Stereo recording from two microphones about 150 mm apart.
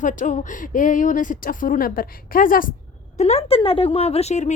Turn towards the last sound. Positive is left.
turn(degrees=50)  # may be behind; listen again after turning